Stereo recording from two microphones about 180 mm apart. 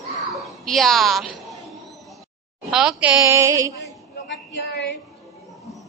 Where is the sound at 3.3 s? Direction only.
15° right (ahead or behind).